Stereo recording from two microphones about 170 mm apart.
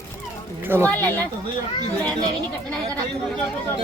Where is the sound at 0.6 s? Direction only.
10° right (ahead or behind).